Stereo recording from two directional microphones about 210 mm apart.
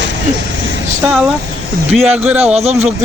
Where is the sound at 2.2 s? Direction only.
5° right (ahead or behind).